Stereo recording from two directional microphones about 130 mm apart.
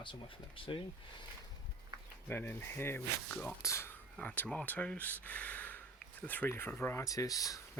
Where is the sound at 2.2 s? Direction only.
15° left (ahead or behind).